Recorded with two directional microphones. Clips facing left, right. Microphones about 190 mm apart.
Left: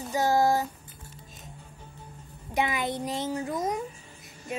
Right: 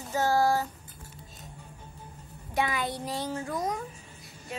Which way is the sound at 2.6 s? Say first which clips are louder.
Left 2 dB; 20° left (ahead or behind).